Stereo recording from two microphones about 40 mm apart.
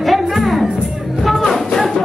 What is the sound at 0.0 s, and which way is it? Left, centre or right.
Music, centre.